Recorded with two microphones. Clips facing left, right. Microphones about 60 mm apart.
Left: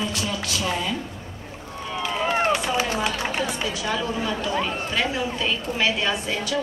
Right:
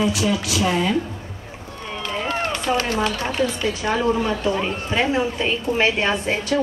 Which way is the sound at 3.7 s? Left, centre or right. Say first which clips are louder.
Right 8 dB; right.